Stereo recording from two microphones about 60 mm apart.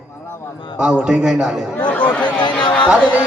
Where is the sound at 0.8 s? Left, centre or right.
Centre.